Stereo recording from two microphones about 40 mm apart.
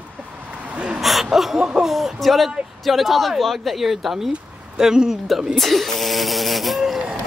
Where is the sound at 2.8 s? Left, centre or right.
Centre.